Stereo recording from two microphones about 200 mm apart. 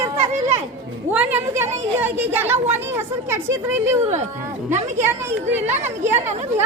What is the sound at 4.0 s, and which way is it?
Speech, 35° right (ahead or behind).